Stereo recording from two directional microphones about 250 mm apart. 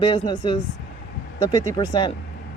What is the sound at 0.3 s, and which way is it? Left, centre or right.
Speech, centre.